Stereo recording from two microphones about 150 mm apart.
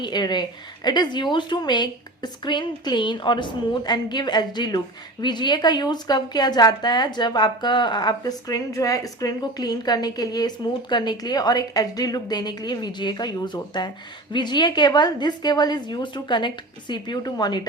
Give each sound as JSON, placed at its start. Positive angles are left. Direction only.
{"t": 0.0, "sound": "a woman's voice", "side_deg": 30}